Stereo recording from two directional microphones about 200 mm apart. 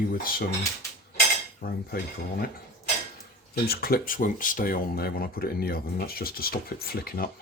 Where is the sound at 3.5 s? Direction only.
50° left (ahead or behind).